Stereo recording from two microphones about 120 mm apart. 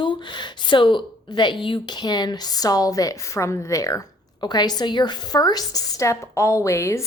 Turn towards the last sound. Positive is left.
turn(degrees=25)  # may be behind; listen again after turning